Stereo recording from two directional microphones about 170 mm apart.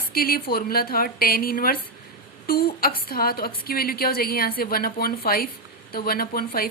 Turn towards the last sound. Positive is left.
turn(degrees=60)  # may be behind; listen again after turning